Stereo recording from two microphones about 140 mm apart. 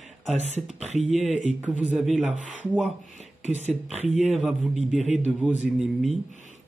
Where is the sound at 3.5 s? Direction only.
55° right (ahead or behind).